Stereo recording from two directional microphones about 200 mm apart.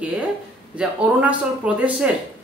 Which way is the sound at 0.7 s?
5° right (ahead or behind).